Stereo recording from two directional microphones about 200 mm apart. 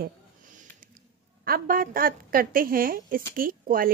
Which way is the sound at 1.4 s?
45° right (ahead or behind).